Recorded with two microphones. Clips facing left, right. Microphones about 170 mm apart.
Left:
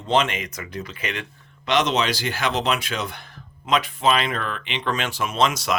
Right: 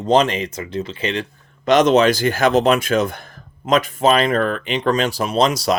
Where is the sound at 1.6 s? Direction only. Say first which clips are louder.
Right 8 dB; 45° right (ahead or behind).